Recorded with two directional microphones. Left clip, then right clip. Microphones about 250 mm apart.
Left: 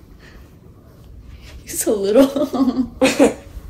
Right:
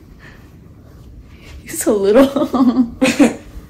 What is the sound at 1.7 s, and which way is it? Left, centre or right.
A woman's voice, centre.